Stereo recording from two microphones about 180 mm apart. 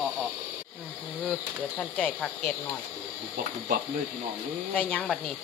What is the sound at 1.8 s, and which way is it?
Speech, 10° left (ahead or behind).